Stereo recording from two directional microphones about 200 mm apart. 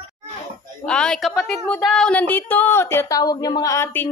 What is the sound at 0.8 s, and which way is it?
Speech, 5° left (ahead or behind).